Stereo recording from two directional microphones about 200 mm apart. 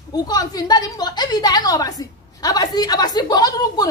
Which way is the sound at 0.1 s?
20° left (ahead or behind).